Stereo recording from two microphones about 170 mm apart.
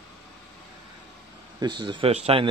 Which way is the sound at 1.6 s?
25° right (ahead or behind).